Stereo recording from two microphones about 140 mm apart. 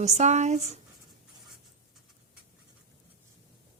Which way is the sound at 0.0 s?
55° right (ahead or behind).